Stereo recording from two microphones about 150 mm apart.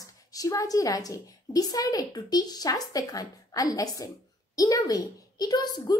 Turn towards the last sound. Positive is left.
turn(degrees=30)  # may be behind; listen again after turning